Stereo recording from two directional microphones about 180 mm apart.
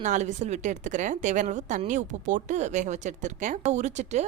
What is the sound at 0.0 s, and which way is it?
A woman's voice, 40° right (ahead or behind).